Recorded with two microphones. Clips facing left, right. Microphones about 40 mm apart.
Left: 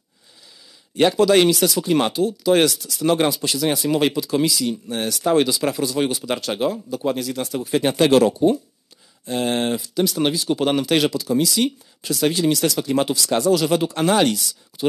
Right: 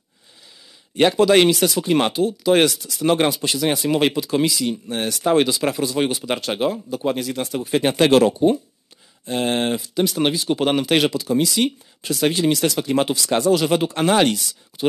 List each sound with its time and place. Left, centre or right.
0.9 s speech: right